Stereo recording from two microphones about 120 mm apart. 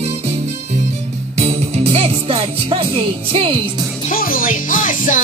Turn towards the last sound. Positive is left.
turn(degrees=90)